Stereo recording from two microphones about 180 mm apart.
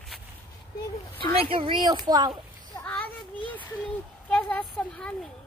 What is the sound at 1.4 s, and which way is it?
Speech, 30° right (ahead or behind).